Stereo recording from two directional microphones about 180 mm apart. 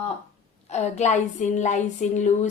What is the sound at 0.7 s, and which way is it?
A woman's voice, 40° left (ahead or behind).